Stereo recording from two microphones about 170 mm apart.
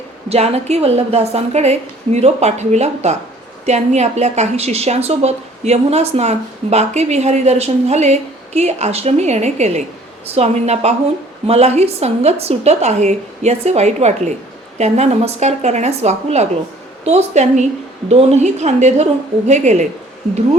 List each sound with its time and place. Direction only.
0.3 s a woman's voice: 40° right (ahead or behind)